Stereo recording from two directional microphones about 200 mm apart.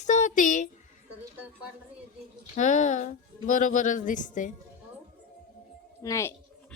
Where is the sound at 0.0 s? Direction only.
40° left (ahead or behind).